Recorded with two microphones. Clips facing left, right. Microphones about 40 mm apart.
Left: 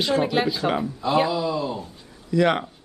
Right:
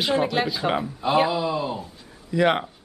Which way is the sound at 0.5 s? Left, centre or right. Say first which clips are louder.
Left 1 dB; centre.